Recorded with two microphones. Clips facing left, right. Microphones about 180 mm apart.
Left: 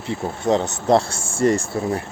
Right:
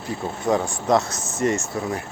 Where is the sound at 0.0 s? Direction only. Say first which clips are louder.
Left 2 dB; 25° left (ahead or behind).